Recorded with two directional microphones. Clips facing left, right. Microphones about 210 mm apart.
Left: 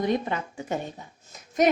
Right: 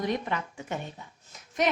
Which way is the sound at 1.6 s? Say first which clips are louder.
Left 6 dB; 40° left (ahead or behind).